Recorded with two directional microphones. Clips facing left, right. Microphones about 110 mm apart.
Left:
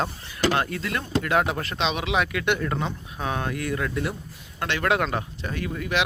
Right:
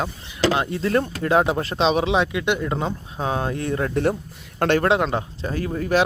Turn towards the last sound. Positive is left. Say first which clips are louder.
# right 6 dB
turn(degrees=-35)  # may be behind; listen again after turning